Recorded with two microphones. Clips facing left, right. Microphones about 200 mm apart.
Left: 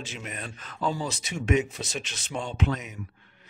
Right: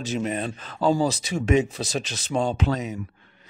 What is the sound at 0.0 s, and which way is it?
Speech, 35° right (ahead or behind).